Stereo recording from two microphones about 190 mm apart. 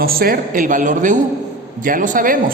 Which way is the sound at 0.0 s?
50° right (ahead or behind).